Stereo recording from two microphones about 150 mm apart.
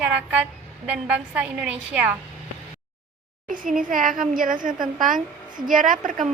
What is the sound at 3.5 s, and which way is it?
A woman's voice, 65° right (ahead or behind).